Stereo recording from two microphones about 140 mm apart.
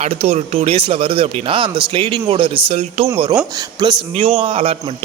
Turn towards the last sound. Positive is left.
turn(degrees=-40)  # may be behind; listen again after turning